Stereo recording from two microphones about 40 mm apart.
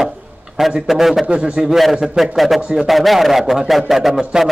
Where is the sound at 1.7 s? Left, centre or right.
Centre.